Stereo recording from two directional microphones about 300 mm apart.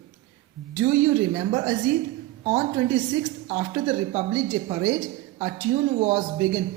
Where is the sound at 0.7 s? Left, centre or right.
Centre.